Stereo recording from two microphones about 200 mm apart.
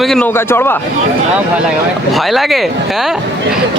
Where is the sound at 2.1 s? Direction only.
Centre (ahead or behind).